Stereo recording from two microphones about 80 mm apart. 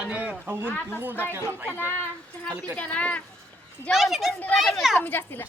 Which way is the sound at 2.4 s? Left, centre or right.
Centre.